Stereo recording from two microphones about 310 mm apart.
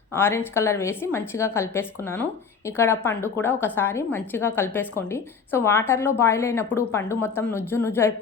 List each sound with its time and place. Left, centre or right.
0.1 s a woman's voice: centre